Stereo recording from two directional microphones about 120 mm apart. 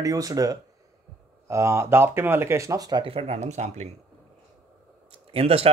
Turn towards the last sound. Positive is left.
turn(degrees=-55)  # may be behind; listen again after turning